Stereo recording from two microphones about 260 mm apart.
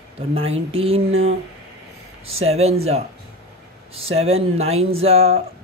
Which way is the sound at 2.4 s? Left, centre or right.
Right.